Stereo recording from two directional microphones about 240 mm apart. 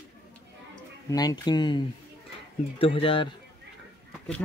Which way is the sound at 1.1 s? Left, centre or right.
Centre.